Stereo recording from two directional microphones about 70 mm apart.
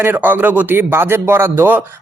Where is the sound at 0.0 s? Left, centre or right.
Right.